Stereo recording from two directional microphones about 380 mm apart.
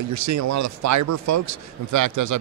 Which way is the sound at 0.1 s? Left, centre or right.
Right.